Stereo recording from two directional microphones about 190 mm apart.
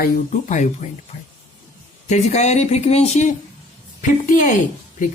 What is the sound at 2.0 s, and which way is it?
Speech, 35° left (ahead or behind).